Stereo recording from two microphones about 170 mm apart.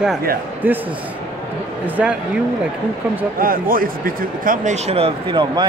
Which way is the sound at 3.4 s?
55° right (ahead or behind).